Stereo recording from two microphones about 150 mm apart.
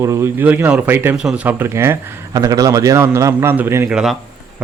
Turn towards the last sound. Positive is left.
turn(degrees=-5)  # may be behind; listen again after turning